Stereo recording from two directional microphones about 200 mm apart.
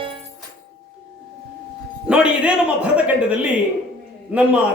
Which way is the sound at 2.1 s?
5° right (ahead or behind).